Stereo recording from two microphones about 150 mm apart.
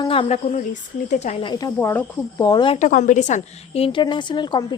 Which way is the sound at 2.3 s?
25° left (ahead or behind).